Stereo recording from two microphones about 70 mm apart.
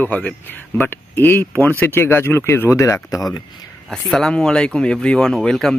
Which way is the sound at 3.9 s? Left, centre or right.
Centre.